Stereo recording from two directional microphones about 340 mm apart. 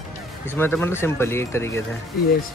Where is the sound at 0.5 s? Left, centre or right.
Centre.